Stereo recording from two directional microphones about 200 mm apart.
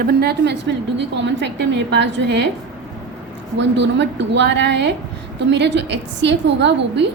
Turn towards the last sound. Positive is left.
turn(degrees=-60)  # may be behind; listen again after turning